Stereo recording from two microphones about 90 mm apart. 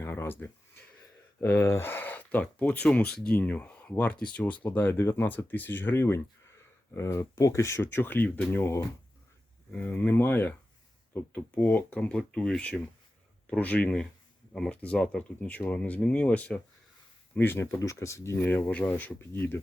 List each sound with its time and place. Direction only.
0.0 s a sound: 25° left (ahead or behind)
1.4 s speech: 30° left (ahead or behind); by 8.6 s 15° left (ahead or behind)
9.7 s speech: 15° left (ahead or behind)